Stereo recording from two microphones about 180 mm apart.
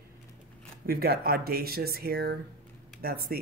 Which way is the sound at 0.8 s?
60° right (ahead or behind).